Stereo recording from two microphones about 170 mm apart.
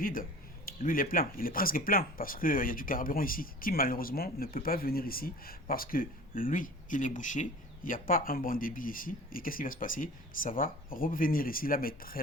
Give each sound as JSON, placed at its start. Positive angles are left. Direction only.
{"t": 0.0, "sound": "speech", "side_deg": 55}